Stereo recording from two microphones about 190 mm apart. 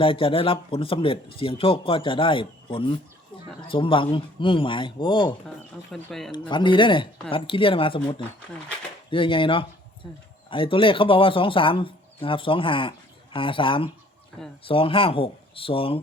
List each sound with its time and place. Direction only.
0.0 s speech: 25° left (ahead or behind)
5.9 s speech: centre (ahead or behind)
6.5 s speech: 25° left (ahead or behind)